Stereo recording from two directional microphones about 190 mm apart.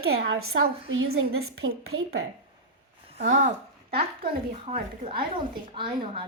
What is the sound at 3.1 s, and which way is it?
Speech, 35° right (ahead or behind).